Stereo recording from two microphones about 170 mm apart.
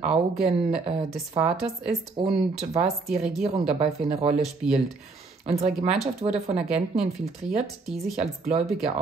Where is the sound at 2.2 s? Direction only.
35° right (ahead or behind).